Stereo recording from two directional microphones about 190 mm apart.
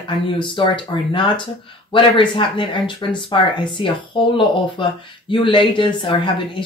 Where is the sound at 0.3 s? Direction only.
25° left (ahead or behind).